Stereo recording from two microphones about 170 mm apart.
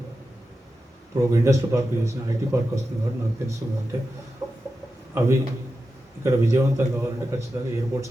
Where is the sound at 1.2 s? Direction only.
20° right (ahead or behind).